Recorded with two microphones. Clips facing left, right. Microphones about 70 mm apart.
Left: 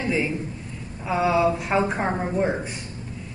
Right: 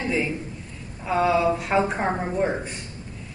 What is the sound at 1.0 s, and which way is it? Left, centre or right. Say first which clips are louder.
A woman's voice: even; centre.